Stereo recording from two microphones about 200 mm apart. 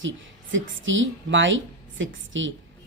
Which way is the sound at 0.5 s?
70° right (ahead or behind).